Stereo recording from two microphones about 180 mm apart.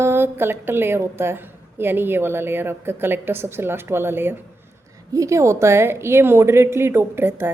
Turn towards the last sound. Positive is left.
turn(degrees=-10)  # may be behind; listen again after turning